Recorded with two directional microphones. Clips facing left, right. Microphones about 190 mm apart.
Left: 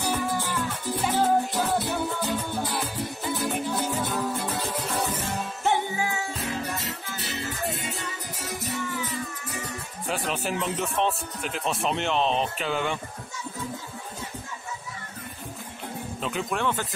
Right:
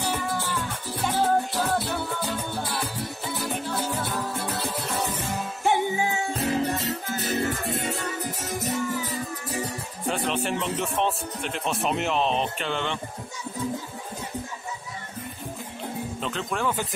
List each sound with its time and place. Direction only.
0.2 s music: 10° left (ahead or behind)
3.8 s music: 15° left (ahead or behind)
5.6 s music: 15° right (ahead or behind)
6.3 s music: 35° right (ahead or behind); by 8.0 s 55° right (ahead or behind)
8.6 s music: 40° right (ahead or behind)
10.0 s speech: 5° left (ahead or behind)
16.2 s speech: 5° left (ahead or behind)